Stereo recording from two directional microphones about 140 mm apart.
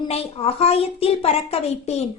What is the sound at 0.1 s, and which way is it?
Speech, 45° left (ahead or behind).